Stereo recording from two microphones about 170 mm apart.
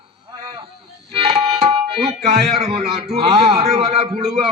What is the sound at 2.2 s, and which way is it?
A man's voice, 40° right (ahead or behind).